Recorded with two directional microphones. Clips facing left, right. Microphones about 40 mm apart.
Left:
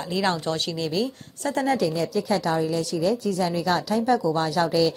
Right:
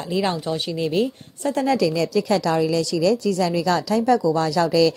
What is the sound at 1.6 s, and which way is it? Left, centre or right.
A woman's voice, right.